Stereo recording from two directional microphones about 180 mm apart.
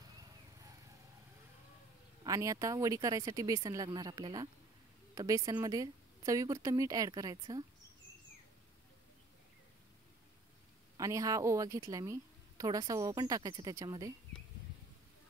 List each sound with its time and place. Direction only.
2.2 s a woman's voice: 20° right (ahead or behind)
11.0 s a woman's voice: 20° right (ahead or behind)